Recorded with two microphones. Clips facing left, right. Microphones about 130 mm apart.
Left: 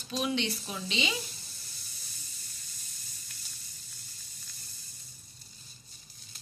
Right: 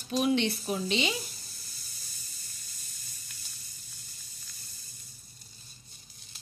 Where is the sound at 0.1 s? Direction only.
45° right (ahead or behind).